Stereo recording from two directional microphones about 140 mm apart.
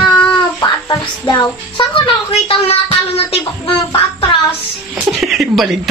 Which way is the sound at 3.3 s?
40° left (ahead or behind).